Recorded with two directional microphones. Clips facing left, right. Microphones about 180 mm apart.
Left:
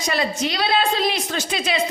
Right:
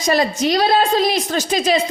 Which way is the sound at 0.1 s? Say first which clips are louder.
Right 7 dB; 40° right (ahead or behind).